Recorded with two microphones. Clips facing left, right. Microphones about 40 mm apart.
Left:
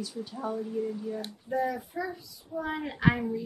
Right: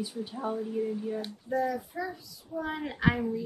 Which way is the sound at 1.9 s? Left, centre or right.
Centre.